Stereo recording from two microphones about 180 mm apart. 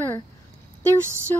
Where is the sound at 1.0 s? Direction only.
15° right (ahead or behind).